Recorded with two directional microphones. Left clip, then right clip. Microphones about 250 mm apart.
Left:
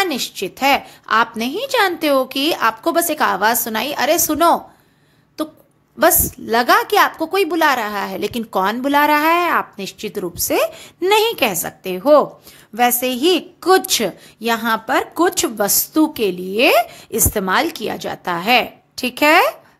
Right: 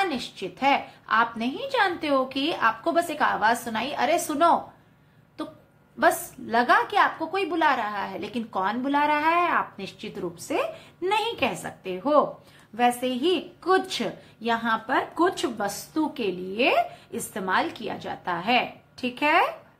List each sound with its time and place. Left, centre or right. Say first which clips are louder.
0.0 s a woman's voice: left 7 dB; left
5.9 s a woman's voice: left 7 dB; left